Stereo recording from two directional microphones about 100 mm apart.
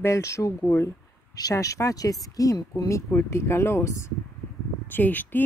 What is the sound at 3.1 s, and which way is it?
Speech, 25° left (ahead or behind).